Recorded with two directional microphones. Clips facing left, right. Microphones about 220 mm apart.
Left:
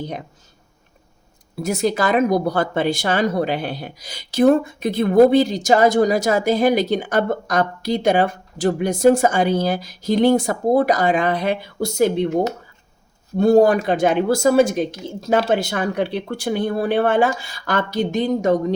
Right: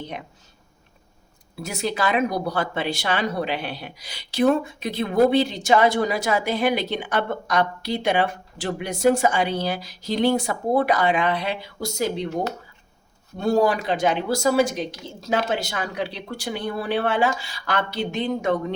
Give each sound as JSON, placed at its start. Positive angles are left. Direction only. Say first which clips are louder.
{"t": 0.0, "sound": "speech", "louder": "left 5 dB", "side_deg": 40}
{"t": 1.5, "sound": "speech", "louder": "left 7 dB", "side_deg": 45}